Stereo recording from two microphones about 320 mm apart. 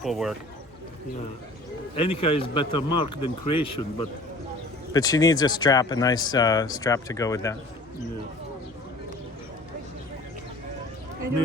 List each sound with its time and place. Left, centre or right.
0.0 s speech: centre
2.0 s speech: centre
4.9 s speech: centre